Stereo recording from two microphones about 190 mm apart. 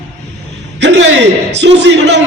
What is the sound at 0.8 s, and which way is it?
A man's voice, 70° right (ahead or behind).